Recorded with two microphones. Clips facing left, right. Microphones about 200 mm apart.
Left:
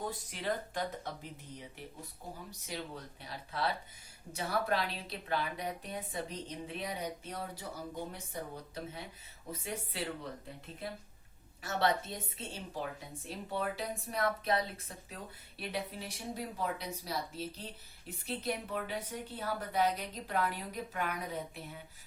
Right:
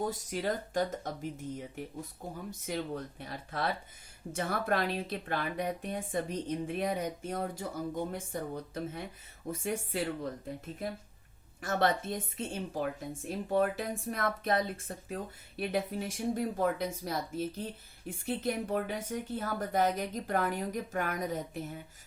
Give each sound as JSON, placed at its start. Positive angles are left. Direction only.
{"t": 0.1, "sound": "a woman's voice", "side_deg": -45}
{"t": 11.6, "sound": "a woman's voice", "side_deg": -50}